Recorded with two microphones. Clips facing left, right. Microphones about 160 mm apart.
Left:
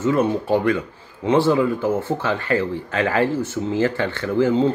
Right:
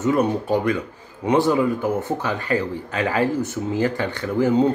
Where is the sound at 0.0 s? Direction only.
15° right (ahead or behind).